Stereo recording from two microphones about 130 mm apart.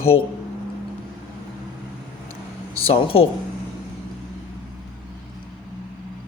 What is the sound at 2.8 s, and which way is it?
Speech, 45° left (ahead or behind).